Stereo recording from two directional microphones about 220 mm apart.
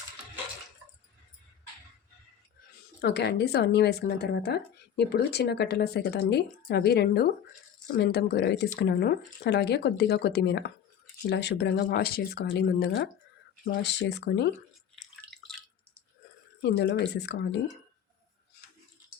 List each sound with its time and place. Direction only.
3.0 s speech: 50° left (ahead or behind)
16.6 s speech: 50° left (ahead or behind)